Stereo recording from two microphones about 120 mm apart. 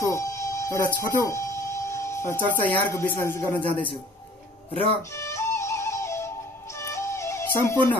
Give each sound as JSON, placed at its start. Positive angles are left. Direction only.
{"t": 0.0, "sound": "music", "side_deg": 25}
{"t": 5.1, "sound": "music", "side_deg": 25}